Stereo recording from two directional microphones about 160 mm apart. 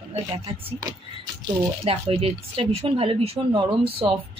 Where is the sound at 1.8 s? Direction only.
35° right (ahead or behind).